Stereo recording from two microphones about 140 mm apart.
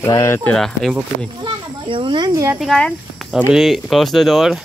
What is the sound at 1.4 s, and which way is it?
Speech, 35° right (ahead or behind).